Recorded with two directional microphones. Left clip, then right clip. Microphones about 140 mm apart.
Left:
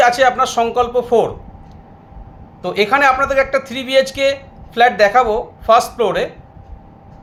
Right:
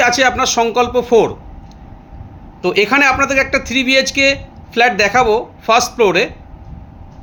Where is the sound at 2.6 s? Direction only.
40° right (ahead or behind).